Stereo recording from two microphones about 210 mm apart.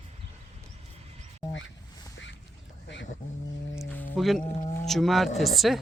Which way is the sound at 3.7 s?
10° left (ahead or behind).